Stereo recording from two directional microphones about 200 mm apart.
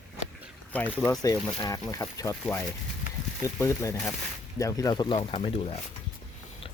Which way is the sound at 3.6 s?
15° left (ahead or behind).